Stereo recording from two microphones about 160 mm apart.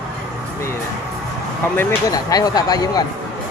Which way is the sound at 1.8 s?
20° left (ahead or behind).